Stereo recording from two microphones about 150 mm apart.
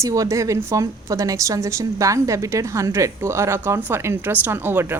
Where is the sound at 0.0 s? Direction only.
20° right (ahead or behind).